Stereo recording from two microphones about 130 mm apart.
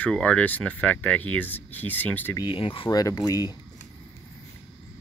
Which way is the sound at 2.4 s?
40° left (ahead or behind).